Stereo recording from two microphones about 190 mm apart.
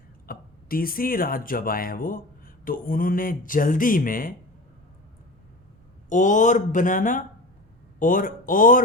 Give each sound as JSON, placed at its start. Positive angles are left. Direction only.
{"t": 0.3, "sound": "speech", "side_deg": 50}
{"t": 6.1, "sound": "speech", "side_deg": 40}